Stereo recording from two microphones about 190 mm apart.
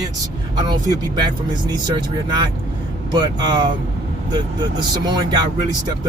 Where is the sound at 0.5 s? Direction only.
25° right (ahead or behind).